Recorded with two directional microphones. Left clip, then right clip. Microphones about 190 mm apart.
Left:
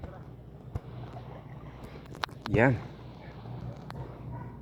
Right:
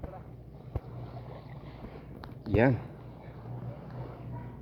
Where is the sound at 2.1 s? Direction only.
90° left.